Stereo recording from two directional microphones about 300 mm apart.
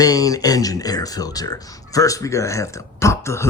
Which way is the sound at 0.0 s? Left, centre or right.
Centre.